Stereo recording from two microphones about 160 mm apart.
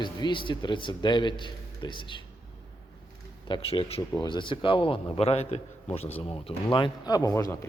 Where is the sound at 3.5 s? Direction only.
30° left (ahead or behind).